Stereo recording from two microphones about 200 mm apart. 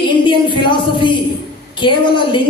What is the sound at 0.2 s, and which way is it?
A woman's voice, 25° left (ahead or behind).